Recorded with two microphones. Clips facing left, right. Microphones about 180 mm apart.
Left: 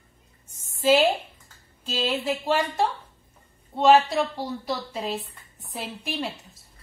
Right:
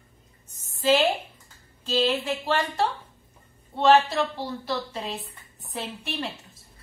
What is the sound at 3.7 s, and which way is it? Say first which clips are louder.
A woman's voice: left 1 dB; 10° left (ahead or behind).